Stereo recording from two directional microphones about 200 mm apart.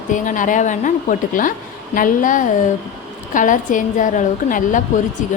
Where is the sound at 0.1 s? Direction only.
40° left (ahead or behind).